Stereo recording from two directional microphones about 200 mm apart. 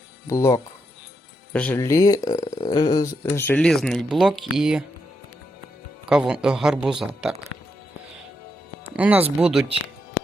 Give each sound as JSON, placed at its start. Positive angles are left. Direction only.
{"t": 0.3, "sound": "speech", "side_deg": 15}
{"t": 6.1, "sound": "speech", "side_deg": -5}
{"t": 9.0, "sound": "speech", "side_deg": -5}